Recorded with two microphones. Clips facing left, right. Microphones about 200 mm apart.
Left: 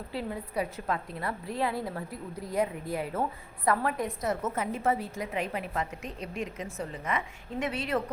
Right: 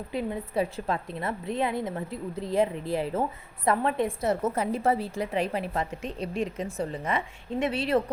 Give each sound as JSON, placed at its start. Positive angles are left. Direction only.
{"t": 0.1, "sound": "a woman's voice", "side_deg": -20}